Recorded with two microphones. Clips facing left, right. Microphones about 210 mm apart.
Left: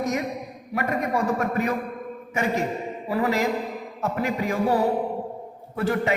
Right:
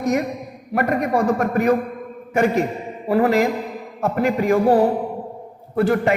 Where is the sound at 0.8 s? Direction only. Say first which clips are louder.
Right 6 dB; 55° right (ahead or behind).